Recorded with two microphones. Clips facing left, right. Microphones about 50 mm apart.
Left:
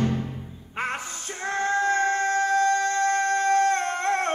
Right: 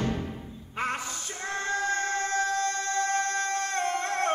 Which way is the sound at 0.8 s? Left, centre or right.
Left.